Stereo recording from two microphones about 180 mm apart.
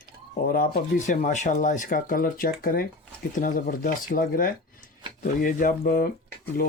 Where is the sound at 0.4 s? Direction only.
50° left (ahead or behind).